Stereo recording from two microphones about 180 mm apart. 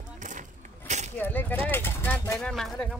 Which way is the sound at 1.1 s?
10° left (ahead or behind).